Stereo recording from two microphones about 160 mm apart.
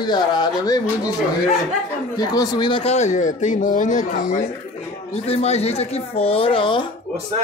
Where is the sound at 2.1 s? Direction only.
25° left (ahead or behind); by 4.4 s 55° left (ahead or behind).